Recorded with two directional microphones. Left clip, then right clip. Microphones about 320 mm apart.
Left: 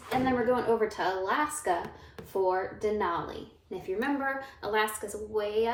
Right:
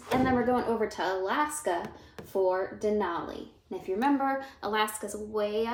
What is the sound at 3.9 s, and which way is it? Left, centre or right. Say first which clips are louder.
A woman's voice: right 4 dB; centre.